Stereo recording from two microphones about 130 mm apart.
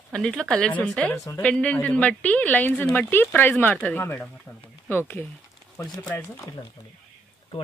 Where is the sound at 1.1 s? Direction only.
25° left (ahead or behind).